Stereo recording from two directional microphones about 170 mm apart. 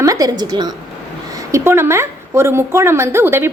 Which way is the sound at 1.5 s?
15° right (ahead or behind).